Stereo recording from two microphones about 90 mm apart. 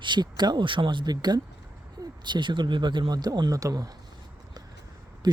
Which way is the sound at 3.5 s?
40° right (ahead or behind).